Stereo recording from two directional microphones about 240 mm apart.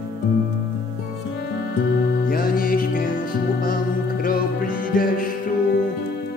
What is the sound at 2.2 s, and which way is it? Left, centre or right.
Music, left.